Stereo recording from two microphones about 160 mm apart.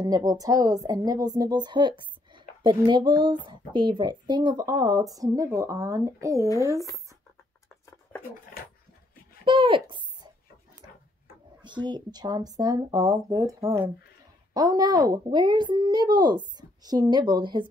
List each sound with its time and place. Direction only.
0.0 s a woman's voice: 25° right (ahead or behind)
9.4 s speech: 30° right (ahead or behind)
11.6 s a woman's voice: 30° right (ahead or behind)